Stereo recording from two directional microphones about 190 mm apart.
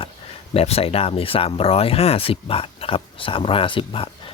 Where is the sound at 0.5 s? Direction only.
30° left (ahead or behind).